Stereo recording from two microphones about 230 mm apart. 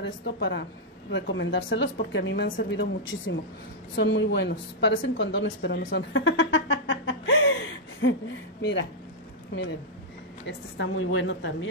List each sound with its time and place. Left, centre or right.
0.0 s a woman's voice: left
10.4 s speech: left